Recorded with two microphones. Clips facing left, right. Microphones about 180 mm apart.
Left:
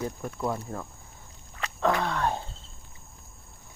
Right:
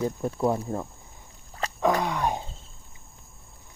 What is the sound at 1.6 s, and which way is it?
Wild animals, 35° right (ahead or behind).